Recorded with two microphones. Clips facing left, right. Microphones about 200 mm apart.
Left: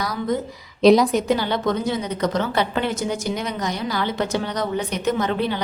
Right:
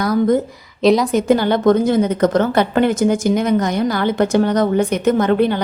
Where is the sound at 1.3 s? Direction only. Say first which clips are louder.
Right 8 dB; 50° right (ahead or behind).